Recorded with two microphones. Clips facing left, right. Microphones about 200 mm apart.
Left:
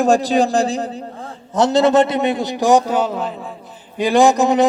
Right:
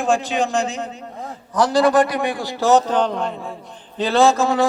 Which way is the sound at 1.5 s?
25° left (ahead or behind).